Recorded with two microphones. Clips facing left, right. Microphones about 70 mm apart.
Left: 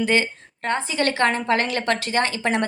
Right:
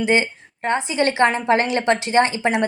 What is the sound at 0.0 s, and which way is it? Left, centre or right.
A woman's voice, right.